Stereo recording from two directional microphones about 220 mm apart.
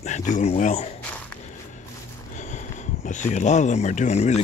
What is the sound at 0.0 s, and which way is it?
Speech, 35° left (ahead or behind).